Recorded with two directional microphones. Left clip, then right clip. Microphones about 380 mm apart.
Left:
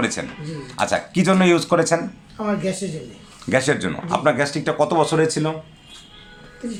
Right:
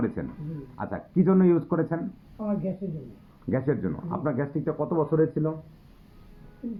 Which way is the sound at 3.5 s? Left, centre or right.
Centre.